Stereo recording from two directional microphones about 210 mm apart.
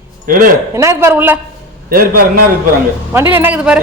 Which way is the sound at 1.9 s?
45° right (ahead or behind).